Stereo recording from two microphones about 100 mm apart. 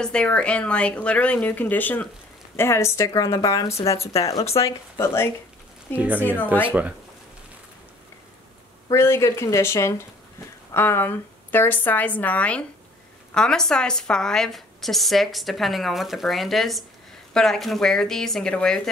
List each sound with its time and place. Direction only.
0.0 s a woman's voice: 10° left (ahead or behind); by 5.3 s 25° left (ahead or behind)
5.9 s speech: 15° right (ahead or behind)
6.2 s a woman's voice: 20° left (ahead or behind)
8.9 s a woman's voice: 25° left (ahead or behind); by 18.8 s 10° left (ahead or behind)